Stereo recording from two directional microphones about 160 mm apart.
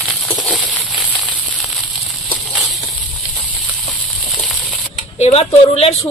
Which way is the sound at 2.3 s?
Centre (ahead or behind).